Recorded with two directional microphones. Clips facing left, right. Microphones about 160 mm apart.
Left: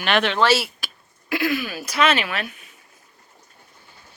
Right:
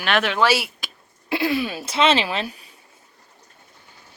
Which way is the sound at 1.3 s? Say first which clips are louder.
Right 1 dB; 30° right (ahead or behind).